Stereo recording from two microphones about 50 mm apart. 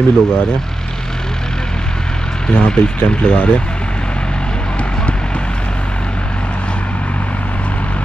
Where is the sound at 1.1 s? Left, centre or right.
Centre.